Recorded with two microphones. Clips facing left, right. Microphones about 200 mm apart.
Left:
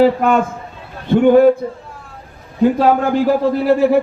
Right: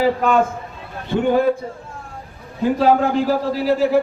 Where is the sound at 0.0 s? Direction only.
55° left (ahead or behind).